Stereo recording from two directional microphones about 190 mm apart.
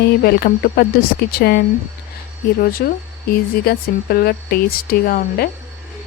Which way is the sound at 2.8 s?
55° left (ahead or behind).